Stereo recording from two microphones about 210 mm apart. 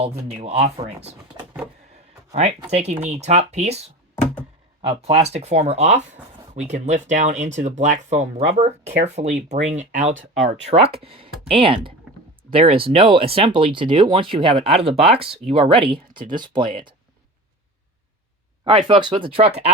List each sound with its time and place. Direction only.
0.0 s speech: 30° right (ahead or behind)
2.6 s speech: 30° right (ahead or behind)
4.1 s a sound: 10° left (ahead or behind)
4.9 s speech: 25° right (ahead or behind)
10.2 s speech: 65° right (ahead or behind)
10.5 s speech: 30° right (ahead or behind)
18.9 s speech: 25° right (ahead or behind)